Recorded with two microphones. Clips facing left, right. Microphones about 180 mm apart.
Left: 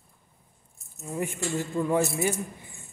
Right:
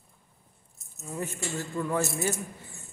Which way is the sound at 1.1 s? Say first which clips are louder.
Left 4 dB; 20° left (ahead or behind).